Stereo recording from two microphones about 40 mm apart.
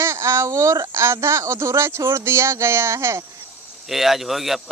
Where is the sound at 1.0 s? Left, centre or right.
Right.